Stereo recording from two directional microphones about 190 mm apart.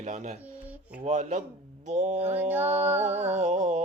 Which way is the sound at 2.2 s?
10° right (ahead or behind).